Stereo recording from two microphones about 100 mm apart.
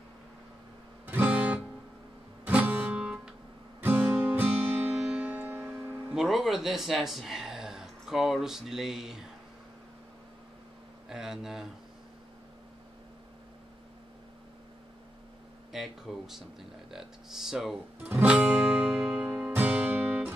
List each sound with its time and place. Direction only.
1.0 s music: 15° right (ahead or behind)
6.0 s speech: 5° right (ahead or behind)
11.1 s speech: 5° right (ahead or behind)
15.7 s speech: 5° right (ahead or behind)
18.0 s music: 15° right (ahead or behind)